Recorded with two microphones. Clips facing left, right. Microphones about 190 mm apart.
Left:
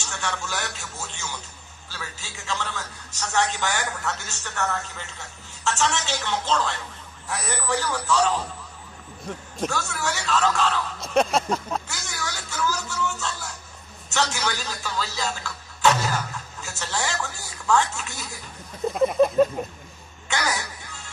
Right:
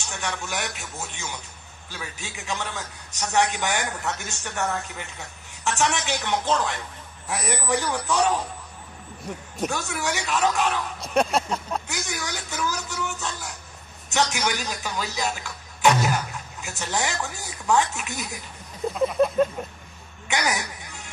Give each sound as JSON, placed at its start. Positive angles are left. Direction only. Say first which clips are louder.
{"t": 0.0, "sound": "a man's voice", "louder": "even", "side_deg": -15}
{"t": 9.7, "sound": "a man's voice", "louder": "even", "side_deg": -15}
{"t": 11.1, "sound": "a sound", "louder": "left 1 dB", "side_deg": -5}
{"t": 11.9, "sound": "a sound", "louder": "right 2 dB", "side_deg": -15}
{"t": 14.1, "sound": "a man's voice", "louder": "right 2 dB", "side_deg": -15}
{"t": 20.2, "sound": "crow", "louder": "right 1 dB", "side_deg": -15}